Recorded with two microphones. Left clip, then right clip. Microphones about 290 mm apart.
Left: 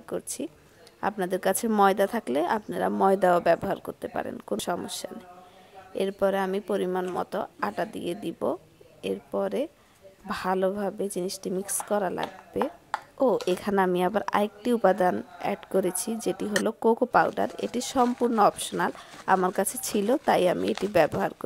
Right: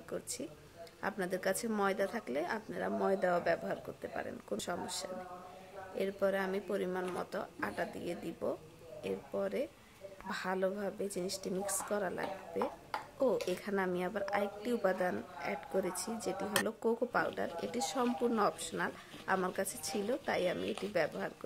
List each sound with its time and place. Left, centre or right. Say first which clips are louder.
0.1 s a woman's voice: left 9 dB; left